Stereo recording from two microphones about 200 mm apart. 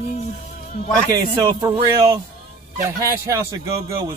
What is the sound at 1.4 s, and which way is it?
Music, 20° right (ahead or behind).